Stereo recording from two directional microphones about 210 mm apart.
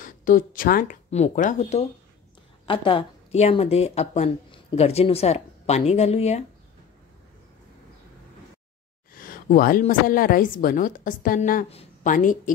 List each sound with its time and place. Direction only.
0.0 s a woman's voice: 40° left (ahead or behind)
9.1 s a woman's voice: 40° left (ahead or behind)